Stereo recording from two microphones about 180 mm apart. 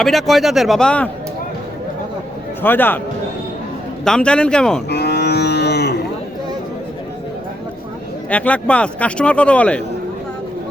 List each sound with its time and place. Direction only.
0.0 s a man's voice: centre (ahead or behind)
2.6 s a man's voice: 10° left (ahead or behind)
4.0 s a man's voice: 5° left (ahead or behind)
4.9 s livestock: 65° left (ahead or behind)
8.3 s a man's voice: 5° left (ahead or behind)